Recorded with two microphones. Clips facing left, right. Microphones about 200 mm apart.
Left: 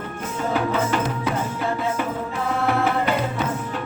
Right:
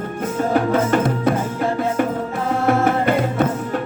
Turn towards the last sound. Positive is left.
turn(degrees=-50)  # may be behind; listen again after turning